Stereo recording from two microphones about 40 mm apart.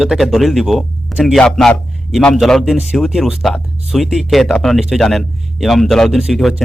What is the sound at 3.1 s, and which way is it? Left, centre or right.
Speech, centre.